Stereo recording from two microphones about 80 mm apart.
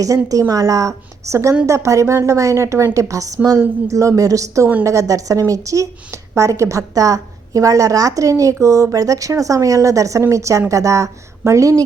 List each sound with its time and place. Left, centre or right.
0.3 s a woman's voice: right